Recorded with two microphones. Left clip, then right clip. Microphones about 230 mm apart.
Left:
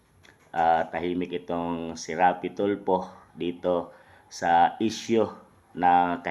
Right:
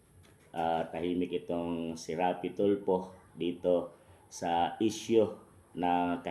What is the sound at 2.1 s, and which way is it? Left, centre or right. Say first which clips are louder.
Speech: left 9 dB; left.